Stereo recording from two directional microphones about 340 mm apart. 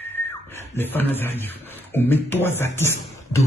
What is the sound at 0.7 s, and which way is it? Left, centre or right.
A man's voice, centre.